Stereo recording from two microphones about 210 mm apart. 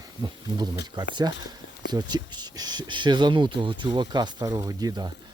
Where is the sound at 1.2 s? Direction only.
20° right (ahead or behind).